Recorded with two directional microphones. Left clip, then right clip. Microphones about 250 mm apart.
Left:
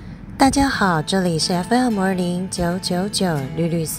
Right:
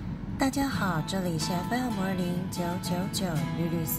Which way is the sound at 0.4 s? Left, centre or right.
Left.